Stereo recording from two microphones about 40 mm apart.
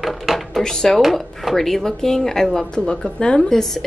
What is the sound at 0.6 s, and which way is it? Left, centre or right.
Speech, centre.